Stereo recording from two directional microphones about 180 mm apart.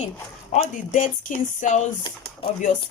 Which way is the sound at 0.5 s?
45° left (ahead or behind).